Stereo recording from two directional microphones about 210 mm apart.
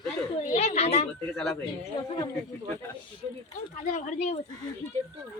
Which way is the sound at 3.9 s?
35° left (ahead or behind).